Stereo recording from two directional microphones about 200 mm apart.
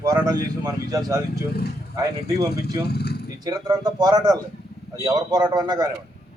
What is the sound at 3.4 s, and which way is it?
Speech, 20° right (ahead or behind).